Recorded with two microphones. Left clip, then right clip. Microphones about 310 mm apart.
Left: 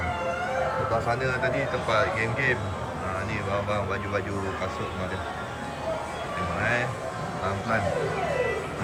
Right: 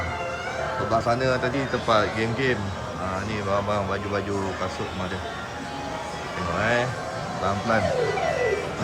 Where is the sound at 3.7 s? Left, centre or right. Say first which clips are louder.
Right 2 dB; centre.